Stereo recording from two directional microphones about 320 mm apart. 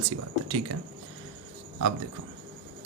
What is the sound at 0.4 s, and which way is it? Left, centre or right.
Speech, right.